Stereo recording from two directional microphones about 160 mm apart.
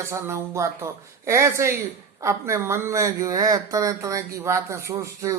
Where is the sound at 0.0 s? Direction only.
15° right (ahead or behind).